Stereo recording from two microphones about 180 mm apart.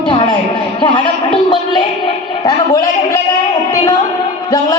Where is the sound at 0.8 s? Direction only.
30° left (ahead or behind).